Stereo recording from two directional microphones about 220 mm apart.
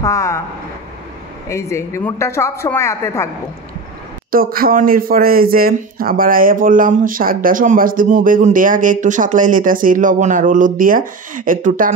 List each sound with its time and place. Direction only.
0.0 s a woman's voice: 15° left (ahead or behind)
1.5 s a woman's voice: 15° left (ahead or behind)
4.3 s speech: 40° right (ahead or behind)